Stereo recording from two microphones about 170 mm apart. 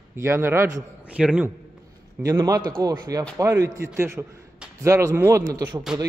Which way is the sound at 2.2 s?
20° right (ahead or behind).